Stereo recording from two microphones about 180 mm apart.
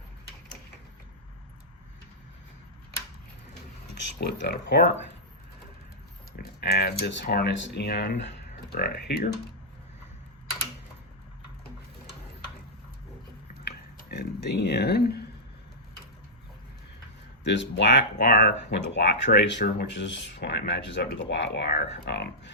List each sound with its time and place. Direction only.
4.2 s speech: 65° left (ahead or behind)
6.3 s speech: 60° left (ahead or behind)
13.7 s a sound: 65° left (ahead or behind)
17.4 s speech: 75° left (ahead or behind)